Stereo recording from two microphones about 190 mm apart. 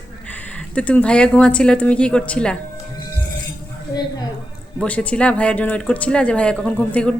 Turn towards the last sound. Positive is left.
turn(degrees=5)  # may be behind; listen again after turning